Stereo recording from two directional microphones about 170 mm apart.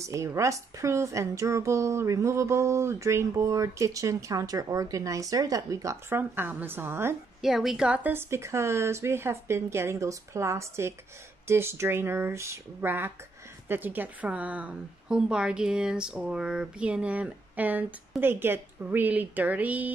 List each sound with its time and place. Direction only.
0.0 s a woman's voice: 15° right (ahead or behind)
7.4 s a woman's voice: centre (ahead or behind)